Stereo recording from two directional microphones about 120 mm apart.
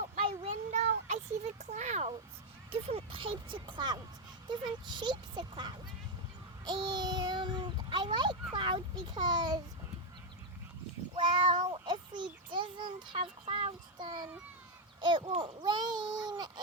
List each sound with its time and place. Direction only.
0.0 s a sound: 60° right (ahead or behind)
2.8 s a child's voice: 50° right (ahead or behind)
11.2 s a child's voice: 40° right (ahead or behind)